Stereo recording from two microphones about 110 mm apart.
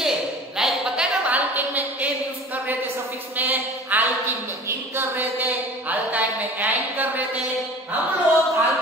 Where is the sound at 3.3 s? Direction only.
15° right (ahead or behind).